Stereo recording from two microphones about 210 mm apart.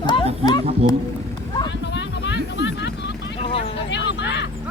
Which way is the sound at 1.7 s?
55° left (ahead or behind).